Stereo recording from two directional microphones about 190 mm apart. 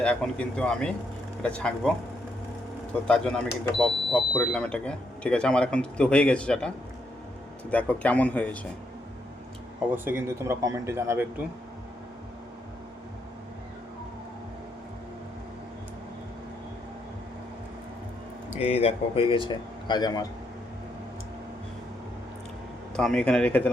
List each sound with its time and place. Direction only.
0.0 s speech: 5° left (ahead or behind)
3.1 s speech: 5° left (ahead or behind)
7.7 s speech: 5° left (ahead or behind)
9.8 s speech: 10° right (ahead or behind)
18.6 s speech: 35° left (ahead or behind)
23.0 s speech: 5° left (ahead or behind)